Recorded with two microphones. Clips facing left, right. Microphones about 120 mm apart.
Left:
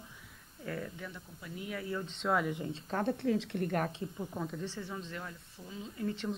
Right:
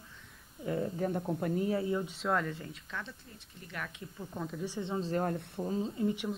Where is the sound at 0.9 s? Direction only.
45° right (ahead or behind).